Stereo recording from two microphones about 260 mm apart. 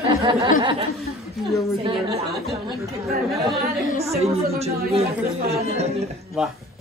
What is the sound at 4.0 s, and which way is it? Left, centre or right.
Speech, right.